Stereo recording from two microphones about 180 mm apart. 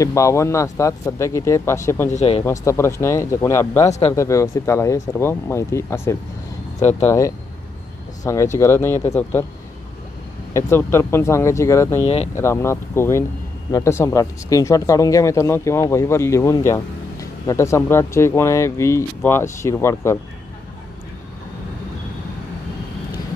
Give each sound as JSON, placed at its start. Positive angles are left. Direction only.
{"t": 0.0, "sound": "speech", "side_deg": 15}
{"t": 2.0, "sound": "speech", "side_deg": 35}
{"t": 2.4, "sound": "speech", "side_deg": 15}
{"t": 6.8, "sound": "speech", "side_deg": 40}
{"t": 7.1, "sound": "speech", "side_deg": 15}
{"t": 10.5, "sound": "speech", "side_deg": 15}
{"t": 12.0, "sound": "speech", "side_deg": 35}
{"t": 12.4, "sound": "speech", "side_deg": 15}